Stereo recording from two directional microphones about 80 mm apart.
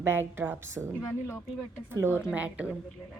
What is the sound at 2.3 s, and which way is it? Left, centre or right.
Speech, centre.